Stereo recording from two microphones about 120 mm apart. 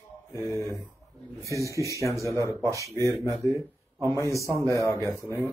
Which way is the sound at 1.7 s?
25° right (ahead or behind).